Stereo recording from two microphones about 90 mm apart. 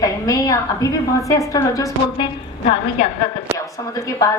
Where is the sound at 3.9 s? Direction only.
35° left (ahead or behind).